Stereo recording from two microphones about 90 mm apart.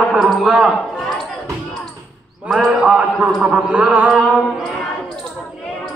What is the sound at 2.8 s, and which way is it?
A man's voice, 10° right (ahead or behind).